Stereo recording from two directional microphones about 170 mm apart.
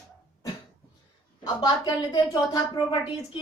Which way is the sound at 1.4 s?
25° left (ahead or behind).